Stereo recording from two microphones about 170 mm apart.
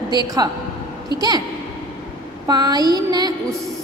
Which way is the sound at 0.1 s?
25° right (ahead or behind).